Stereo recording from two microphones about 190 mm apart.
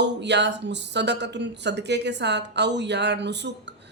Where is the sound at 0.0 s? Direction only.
65° right (ahead or behind).